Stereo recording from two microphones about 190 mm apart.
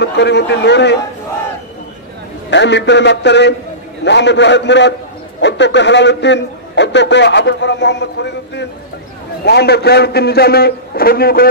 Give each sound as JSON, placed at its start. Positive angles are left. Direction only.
{"t": 0.0, "sound": "a man's voice", "side_deg": 65}
{"t": 2.5, "sound": "a man's voice", "side_deg": 65}